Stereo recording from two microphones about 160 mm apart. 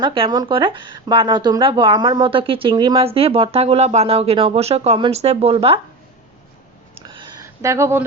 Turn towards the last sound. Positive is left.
turn(degrees=-15)  # may be behind; listen again after turning